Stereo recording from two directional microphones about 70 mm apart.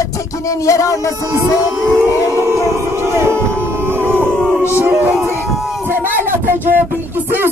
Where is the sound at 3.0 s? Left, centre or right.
Right.